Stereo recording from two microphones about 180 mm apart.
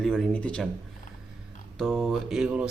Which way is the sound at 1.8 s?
Centre (ahead or behind).